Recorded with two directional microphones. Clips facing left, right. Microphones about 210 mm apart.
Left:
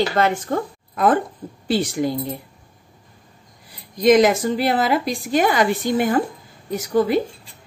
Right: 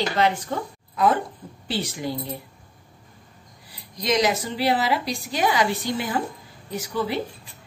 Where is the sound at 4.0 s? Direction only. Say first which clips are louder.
Left 9 dB; 50° left (ahead or behind).